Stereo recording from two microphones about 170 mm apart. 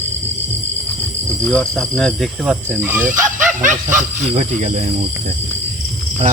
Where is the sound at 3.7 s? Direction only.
45° right (ahead or behind).